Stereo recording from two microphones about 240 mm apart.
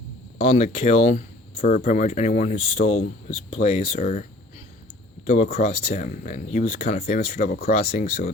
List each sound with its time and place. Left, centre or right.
0.3 s speech: left